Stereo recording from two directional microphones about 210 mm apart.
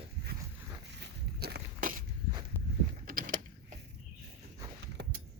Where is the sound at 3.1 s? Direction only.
40° right (ahead or behind).